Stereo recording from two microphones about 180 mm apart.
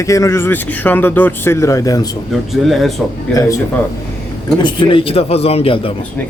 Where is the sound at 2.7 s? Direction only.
Centre (ahead or behind).